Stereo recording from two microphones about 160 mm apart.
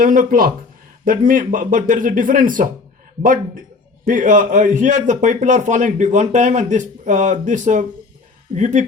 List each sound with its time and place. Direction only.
0.0 s speech: 55° right (ahead or behind)
4.0 s a man's voice: 55° right (ahead or behind)